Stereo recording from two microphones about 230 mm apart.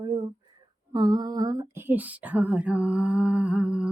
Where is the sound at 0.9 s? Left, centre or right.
Centre.